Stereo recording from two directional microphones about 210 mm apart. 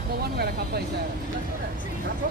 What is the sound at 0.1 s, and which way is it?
Speech, 50° right (ahead or behind).